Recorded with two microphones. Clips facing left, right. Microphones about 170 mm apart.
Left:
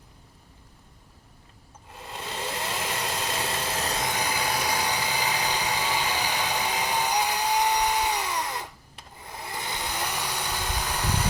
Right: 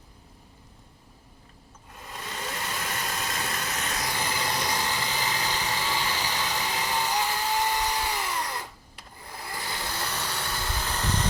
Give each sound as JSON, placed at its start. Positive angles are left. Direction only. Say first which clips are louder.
{"t": 2.0, "sound": "vehicle", "louder": "left 3 dB", "side_deg": 30}
{"t": 4.1, "sound": "vehicle", "louder": "left 2 dB", "side_deg": 15}